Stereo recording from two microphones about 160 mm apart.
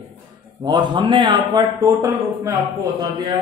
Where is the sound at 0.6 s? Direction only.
30° right (ahead or behind).